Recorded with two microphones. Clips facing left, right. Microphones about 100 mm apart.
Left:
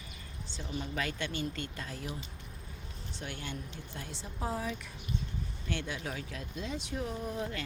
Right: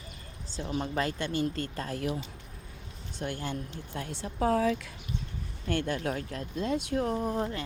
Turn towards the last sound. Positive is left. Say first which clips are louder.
# right 6 dB
turn(degrees=-45)  # may be behind; listen again after turning